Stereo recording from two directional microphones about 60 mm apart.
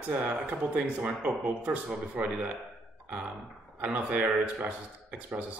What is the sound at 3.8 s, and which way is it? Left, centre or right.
Speech, right.